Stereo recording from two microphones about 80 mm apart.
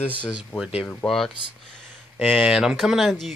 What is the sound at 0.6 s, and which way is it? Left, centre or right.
Speech, centre.